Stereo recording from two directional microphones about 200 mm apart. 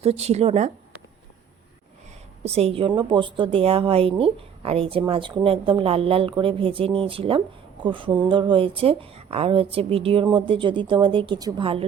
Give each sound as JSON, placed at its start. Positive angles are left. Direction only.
{"t": 0.0, "sound": "speech", "side_deg": -30}
{"t": 2.5, "sound": "a woman's voice", "side_deg": -30}